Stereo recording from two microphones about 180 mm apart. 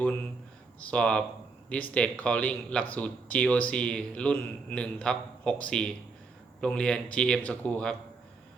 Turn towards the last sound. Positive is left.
turn(degrees=5)  # may be behind; listen again after turning